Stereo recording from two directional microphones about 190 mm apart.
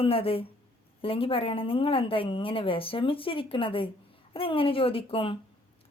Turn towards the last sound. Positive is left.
turn(degrees=30)  # may be behind; listen again after turning